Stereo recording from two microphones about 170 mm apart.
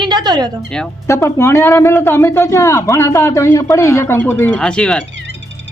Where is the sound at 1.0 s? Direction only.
15° left (ahead or behind).